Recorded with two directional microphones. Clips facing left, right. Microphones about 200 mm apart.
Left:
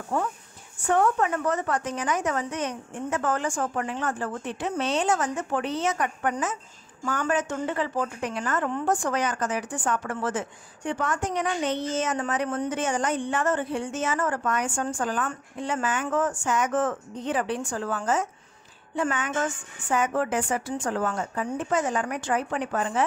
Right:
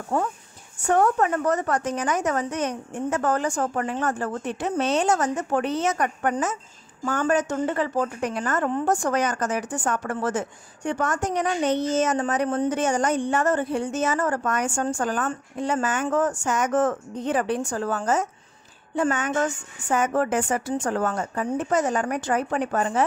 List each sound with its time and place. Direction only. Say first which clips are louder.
0.1 s a woman's voice: right 3 dB; 35° right (ahead or behind)